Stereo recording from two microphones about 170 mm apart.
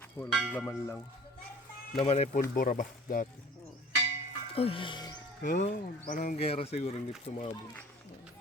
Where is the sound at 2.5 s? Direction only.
55° left (ahead or behind).